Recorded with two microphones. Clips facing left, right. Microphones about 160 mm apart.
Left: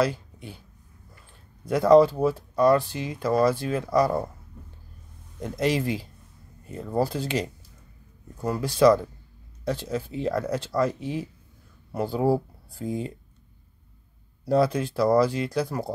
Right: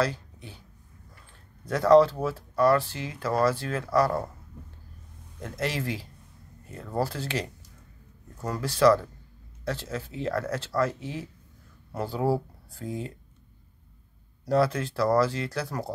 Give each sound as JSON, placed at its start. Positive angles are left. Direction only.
{"t": 0.0, "sound": "speech", "side_deg": 15}
{"t": 1.7, "sound": "speech", "side_deg": 10}
{"t": 5.4, "sound": "speech", "side_deg": 15}
{"t": 14.4, "sound": "speech", "side_deg": 15}